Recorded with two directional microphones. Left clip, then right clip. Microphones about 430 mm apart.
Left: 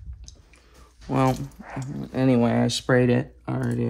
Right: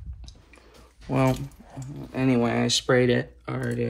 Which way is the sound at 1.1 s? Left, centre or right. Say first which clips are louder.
Left 1 dB; centre.